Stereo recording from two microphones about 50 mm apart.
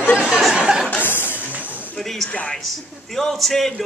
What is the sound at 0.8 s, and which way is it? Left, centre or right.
Chuckle, left.